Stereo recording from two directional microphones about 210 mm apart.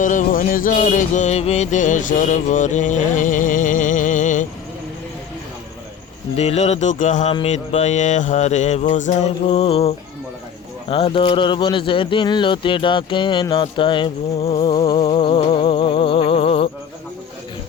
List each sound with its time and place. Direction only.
0.0 s music: 40° left (ahead or behind)
6.3 s music: 30° left (ahead or behind)
10.8 s speech: 25° left (ahead or behind)